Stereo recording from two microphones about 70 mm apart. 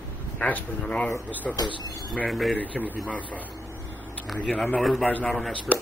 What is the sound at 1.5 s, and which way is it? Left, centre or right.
Speech, left.